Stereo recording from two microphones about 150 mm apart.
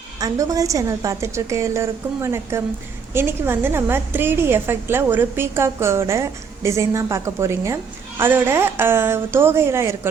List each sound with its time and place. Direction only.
0.2 s a woman's voice: 25° right (ahead or behind)